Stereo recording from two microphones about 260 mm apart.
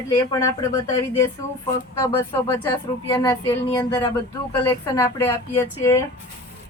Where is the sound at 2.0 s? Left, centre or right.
Centre.